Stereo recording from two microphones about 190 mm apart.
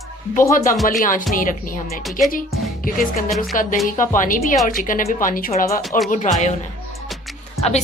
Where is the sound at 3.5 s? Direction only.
45° left (ahead or behind).